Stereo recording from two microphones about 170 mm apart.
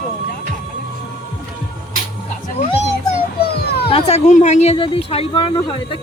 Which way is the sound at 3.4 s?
65° left (ahead or behind).